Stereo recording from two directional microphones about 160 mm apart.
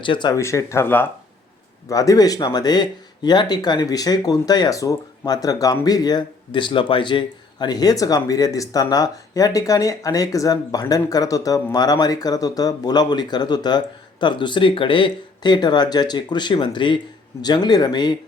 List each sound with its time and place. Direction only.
0.0 s speech: 30° left (ahead or behind)
0.3 s speech: 15° left (ahead or behind)